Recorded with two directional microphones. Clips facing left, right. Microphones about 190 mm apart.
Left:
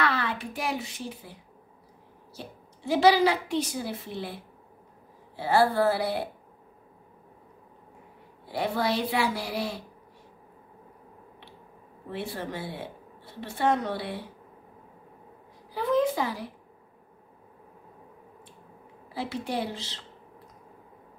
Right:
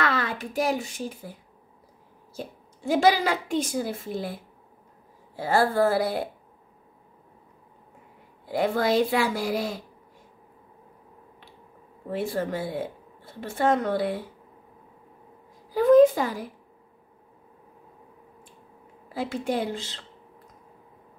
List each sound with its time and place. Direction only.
0.0 s a woman's voice: 45° right (ahead or behind)
8.5 s a woman's voice: 45° right (ahead or behind)
12.1 s a woman's voice: 45° right (ahead or behind)
15.7 s a woman's voice: 45° right (ahead or behind)
19.1 s a woman's voice: 45° right (ahead or behind)